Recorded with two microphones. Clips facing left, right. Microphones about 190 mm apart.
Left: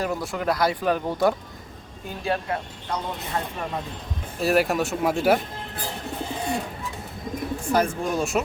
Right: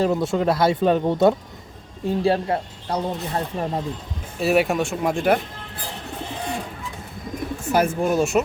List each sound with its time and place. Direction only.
0.0 s speech: 25° right (ahead or behind)
4.4 s speech: centre (ahead or behind)
7.7 s speech: 5° right (ahead or behind)